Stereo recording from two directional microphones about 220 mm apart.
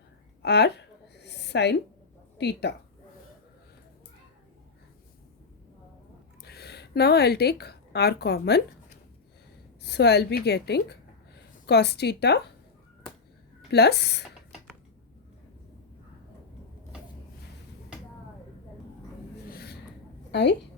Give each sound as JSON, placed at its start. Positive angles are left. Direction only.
{"t": 0.4, "sound": "a sound", "side_deg": 50}
{"t": 2.4, "sound": "a woman's voice", "side_deg": 50}
{"t": 6.4, "sound": "a woman's voice", "side_deg": 45}
{"t": 9.8, "sound": "a woman's voice", "side_deg": 50}
{"t": 13.7, "sound": "a woman's voice", "side_deg": 50}
{"t": 19.5, "sound": "a sound", "side_deg": 45}
{"t": 20.3, "sound": "a woman's voice", "side_deg": 50}